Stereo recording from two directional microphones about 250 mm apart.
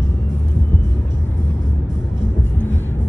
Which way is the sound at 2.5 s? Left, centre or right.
Centre.